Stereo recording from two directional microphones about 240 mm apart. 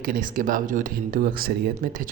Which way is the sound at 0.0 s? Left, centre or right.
Right.